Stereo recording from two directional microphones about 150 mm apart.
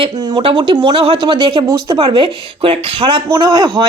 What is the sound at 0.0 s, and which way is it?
Speech, 35° right (ahead or behind).